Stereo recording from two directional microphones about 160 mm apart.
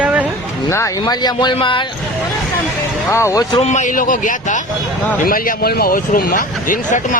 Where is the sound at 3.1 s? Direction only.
20° left (ahead or behind).